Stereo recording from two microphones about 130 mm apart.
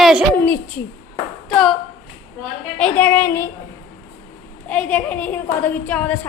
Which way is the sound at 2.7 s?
10° left (ahead or behind).